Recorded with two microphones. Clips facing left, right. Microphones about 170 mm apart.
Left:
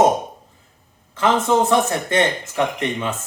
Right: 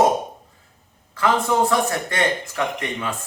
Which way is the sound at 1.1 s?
20° left (ahead or behind).